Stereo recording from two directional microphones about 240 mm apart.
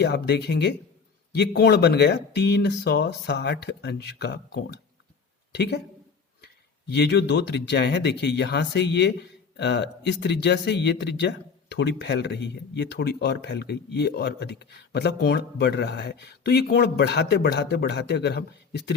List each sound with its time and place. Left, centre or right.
0.0 s speech: left
6.8 s speech: left